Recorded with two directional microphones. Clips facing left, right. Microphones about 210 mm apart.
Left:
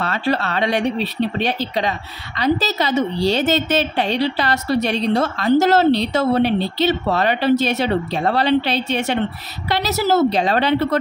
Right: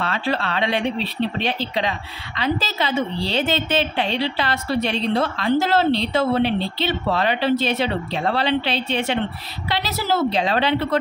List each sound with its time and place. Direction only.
0.0 s a woman's voice: 40° left (ahead or behind)